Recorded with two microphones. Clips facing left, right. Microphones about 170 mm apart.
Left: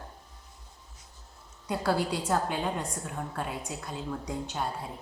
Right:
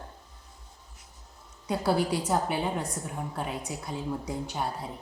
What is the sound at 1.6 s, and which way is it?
A woman's voice, 15° right (ahead or behind).